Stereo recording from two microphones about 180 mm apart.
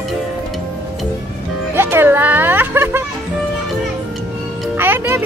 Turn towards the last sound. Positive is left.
turn(degrees=-10)  # may be behind; listen again after turning